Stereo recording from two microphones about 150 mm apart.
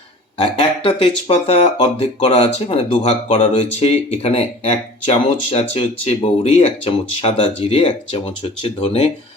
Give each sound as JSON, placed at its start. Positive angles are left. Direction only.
{"t": 0.3, "sound": "speech", "side_deg": 40}